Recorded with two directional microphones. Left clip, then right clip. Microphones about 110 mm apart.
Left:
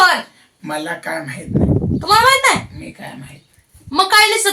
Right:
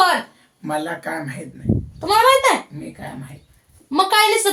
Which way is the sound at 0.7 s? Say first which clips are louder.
Left 2 dB; 35° right (ahead or behind).